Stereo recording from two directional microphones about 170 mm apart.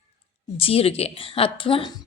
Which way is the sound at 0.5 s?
35° left (ahead or behind).